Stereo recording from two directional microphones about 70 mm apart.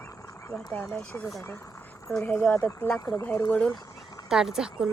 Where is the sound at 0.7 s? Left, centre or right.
Centre.